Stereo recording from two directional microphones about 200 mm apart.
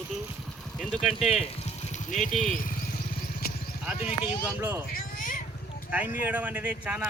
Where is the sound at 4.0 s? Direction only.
30° left (ahead or behind).